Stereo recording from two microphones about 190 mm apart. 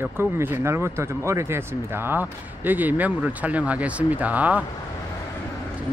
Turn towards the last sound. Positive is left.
turn(degrees=-5)  # may be behind; listen again after turning